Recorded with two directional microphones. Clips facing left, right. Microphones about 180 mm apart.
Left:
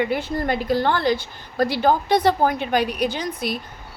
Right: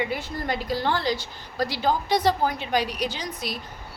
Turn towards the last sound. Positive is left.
turn(degrees=55)  # may be behind; listen again after turning